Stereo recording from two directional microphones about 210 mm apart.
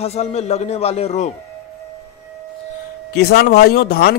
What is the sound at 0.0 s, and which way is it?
A man's voice, 30° left (ahead or behind).